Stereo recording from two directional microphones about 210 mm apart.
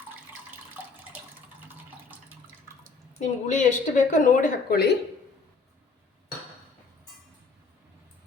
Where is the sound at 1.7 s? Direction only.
10° right (ahead or behind).